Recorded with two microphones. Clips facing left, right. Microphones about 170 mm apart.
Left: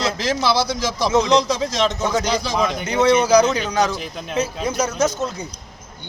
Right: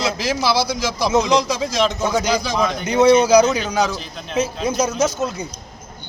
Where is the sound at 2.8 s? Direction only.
10° right (ahead or behind).